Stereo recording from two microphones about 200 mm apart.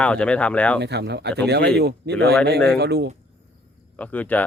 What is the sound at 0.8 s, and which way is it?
Speech, 55° right (ahead or behind).